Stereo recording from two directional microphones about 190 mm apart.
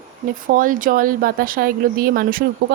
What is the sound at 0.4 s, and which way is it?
A woman's voice, 45° right (ahead or behind).